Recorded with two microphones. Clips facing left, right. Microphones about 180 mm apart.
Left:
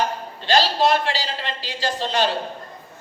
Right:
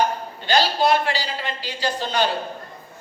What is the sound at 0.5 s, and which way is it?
Speech, 90° left.